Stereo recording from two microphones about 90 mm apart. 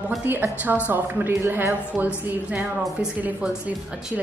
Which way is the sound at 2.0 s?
10° right (ahead or behind).